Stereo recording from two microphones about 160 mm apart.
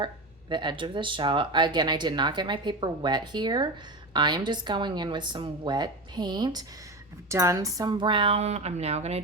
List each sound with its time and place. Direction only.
0.5 s speech: 30° right (ahead or behind)